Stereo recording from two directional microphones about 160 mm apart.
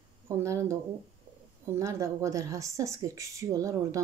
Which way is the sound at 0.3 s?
20° right (ahead or behind).